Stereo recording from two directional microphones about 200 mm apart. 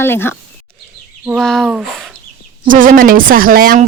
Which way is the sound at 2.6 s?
40° right (ahead or behind).